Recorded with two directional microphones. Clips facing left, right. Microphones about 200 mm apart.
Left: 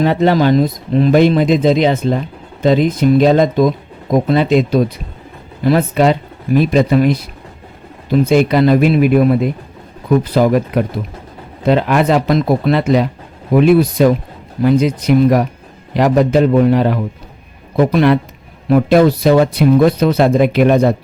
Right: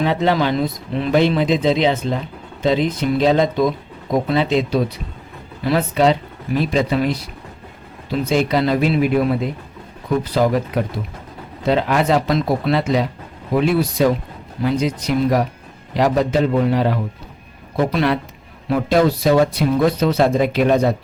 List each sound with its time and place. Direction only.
0.0 s speech: 50° left (ahead or behind)